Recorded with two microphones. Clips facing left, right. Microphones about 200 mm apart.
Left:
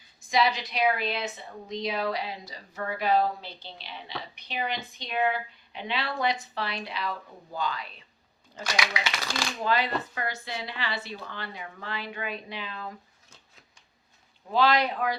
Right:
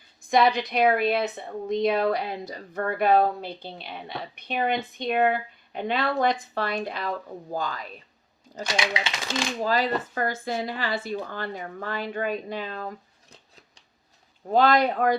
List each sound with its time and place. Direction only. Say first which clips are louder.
0.2 s a woman's voice: right 5 dB; 55° right (ahead or behind)
8.6 s speech: right 3 dB; 25° right (ahead or behind)
9.6 s a woman's voice: right 2 dB; 40° right (ahead or behind)
14.5 s a woman's voice: right 4 dB; 50° right (ahead or behind)